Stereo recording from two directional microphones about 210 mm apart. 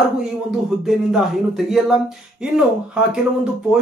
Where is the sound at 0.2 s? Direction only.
Centre (ahead or behind).